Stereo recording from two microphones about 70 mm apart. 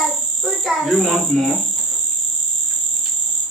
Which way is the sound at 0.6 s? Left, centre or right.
Centre.